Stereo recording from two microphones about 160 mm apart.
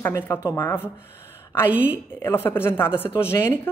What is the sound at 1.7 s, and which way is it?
Speech, 10° right (ahead or behind).